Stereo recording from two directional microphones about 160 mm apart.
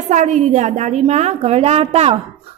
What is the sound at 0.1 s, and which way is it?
A woman's voice, 45° right (ahead or behind).